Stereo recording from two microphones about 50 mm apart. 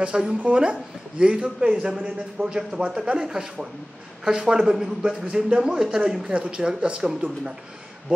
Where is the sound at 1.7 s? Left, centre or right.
Centre.